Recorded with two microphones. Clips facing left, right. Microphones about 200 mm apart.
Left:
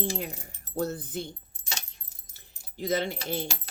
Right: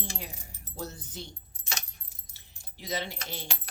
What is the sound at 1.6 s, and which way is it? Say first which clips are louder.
Keys jangling: right 1 dB; 30° left (ahead or behind).